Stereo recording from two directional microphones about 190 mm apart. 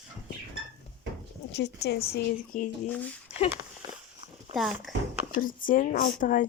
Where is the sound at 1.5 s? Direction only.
60° left (ahead or behind).